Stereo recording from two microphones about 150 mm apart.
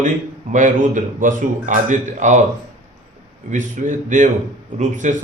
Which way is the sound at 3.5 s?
55° right (ahead or behind).